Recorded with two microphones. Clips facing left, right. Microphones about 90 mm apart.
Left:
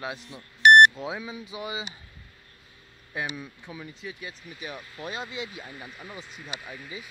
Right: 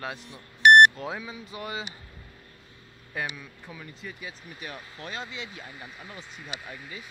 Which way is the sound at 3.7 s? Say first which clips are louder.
Even; 10° left (ahead or behind).